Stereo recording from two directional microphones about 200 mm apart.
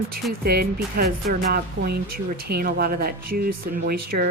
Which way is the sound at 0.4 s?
50° right (ahead or behind).